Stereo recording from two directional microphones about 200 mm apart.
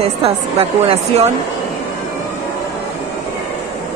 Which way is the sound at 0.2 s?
30° right (ahead or behind).